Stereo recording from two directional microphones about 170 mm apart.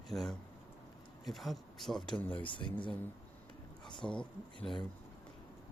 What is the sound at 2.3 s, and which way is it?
Speech, 30° left (ahead or behind).